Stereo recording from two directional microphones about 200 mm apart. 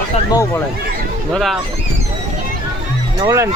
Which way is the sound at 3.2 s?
15° right (ahead or behind).